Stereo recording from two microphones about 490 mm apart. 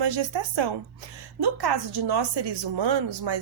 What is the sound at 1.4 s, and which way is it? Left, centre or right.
A woman's voice, right.